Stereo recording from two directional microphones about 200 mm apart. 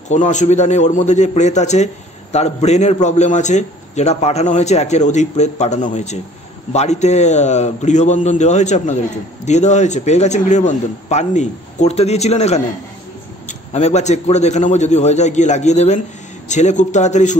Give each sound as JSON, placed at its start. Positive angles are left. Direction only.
{"t": 0.1, "sound": "a man's voice", "side_deg": 35}